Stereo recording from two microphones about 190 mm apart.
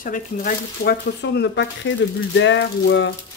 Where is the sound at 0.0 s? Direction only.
45° left (ahead or behind).